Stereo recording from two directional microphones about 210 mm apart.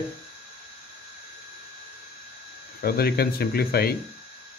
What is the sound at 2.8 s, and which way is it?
Speech, 45° left (ahead or behind).